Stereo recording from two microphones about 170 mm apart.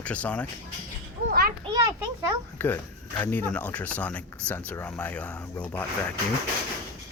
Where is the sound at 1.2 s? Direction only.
65° right (ahead or behind).